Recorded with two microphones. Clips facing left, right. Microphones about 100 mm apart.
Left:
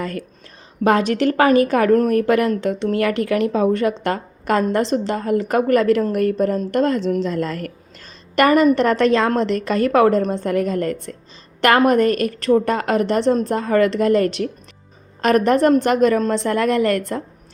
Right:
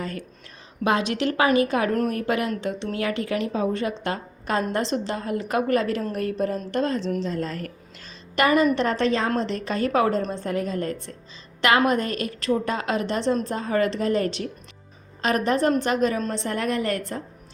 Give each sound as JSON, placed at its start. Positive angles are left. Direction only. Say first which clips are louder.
{"t": 0.0, "sound": "a woman's voice", "louder": "left 5 dB", "side_deg": 60}
{"t": 0.9, "sound": "a woman's voice", "louder": "left 6 dB", "side_deg": 50}
{"t": 8.0, "sound": "a woman's voice", "louder": "left 6 dB", "side_deg": 50}